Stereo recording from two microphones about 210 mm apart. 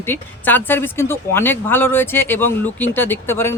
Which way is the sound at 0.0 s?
10° left (ahead or behind).